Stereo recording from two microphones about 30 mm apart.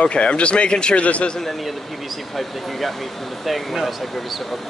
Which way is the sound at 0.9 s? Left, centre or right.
Left.